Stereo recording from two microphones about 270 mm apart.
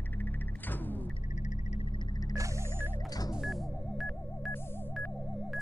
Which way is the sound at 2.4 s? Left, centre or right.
Centre.